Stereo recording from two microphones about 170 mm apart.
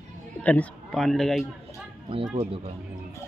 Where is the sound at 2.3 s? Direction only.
35° right (ahead or behind).